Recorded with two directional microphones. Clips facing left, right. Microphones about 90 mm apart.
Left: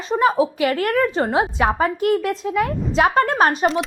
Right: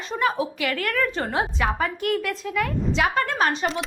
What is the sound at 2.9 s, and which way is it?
Speech, 40° left (ahead or behind).